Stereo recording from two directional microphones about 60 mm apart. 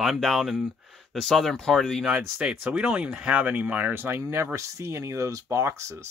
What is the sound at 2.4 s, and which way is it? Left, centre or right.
Speech, centre.